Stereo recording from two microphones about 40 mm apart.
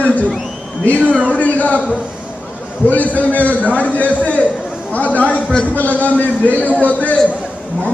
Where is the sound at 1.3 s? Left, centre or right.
Left.